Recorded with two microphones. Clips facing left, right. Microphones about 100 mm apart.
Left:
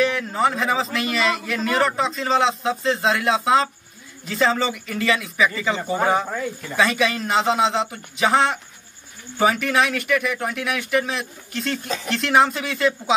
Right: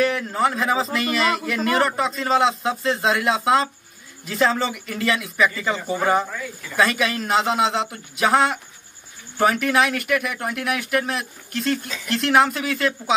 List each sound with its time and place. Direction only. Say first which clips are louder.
0.0 s a man's voice: even; centre (ahead or behind)
6.8 s a man's voice: even; centre (ahead or behind)